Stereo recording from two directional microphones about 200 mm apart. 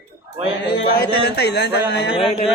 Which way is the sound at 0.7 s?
55° left (ahead or behind).